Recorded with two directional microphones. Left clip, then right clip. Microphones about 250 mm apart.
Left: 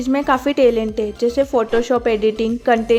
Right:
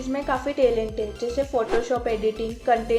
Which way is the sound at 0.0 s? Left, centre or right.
Left.